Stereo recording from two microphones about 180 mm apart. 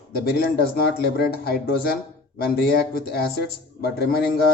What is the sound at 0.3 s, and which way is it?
Speech, 60° left (ahead or behind).